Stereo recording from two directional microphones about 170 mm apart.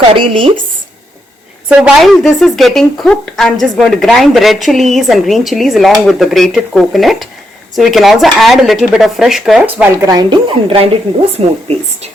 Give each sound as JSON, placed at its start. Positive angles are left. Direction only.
{"t": 0.2, "sound": "speech", "side_deg": -30}
{"t": 1.8, "sound": "a woman's voice", "side_deg": 0}
{"t": 9.9, "sound": "speech", "side_deg": -20}